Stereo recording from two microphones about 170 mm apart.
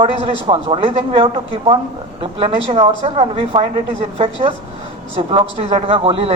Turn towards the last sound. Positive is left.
turn(degrees=-35)  # may be behind; listen again after turning